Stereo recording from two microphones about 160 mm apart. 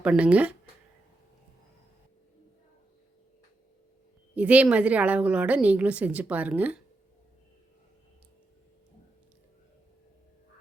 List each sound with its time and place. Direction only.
0.0 s a woman's voice: 5° right (ahead or behind)
4.4 s a woman's voice: 10° right (ahead or behind)